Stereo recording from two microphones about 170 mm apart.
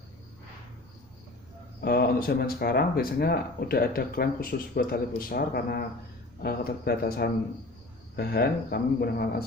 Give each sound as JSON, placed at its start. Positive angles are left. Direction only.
{"t": 1.8, "sound": "speech", "side_deg": 65}